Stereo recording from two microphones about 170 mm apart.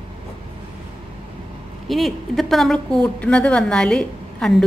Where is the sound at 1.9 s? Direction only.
Centre (ahead or behind).